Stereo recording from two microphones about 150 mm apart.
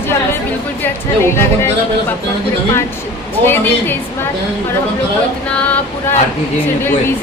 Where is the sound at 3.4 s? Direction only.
15° left (ahead or behind).